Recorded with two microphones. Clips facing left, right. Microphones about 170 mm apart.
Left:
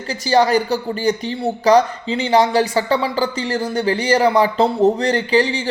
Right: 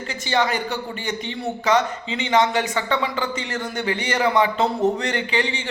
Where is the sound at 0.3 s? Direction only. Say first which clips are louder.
Left 7 dB; 35° left (ahead or behind).